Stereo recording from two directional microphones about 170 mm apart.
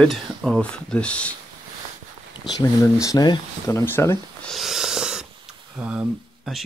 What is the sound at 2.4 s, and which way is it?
Speech, 25° left (ahead or behind).